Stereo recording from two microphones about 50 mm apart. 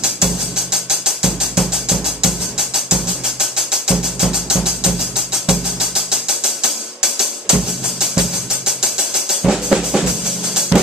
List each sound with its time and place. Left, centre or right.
0.8 s music: centre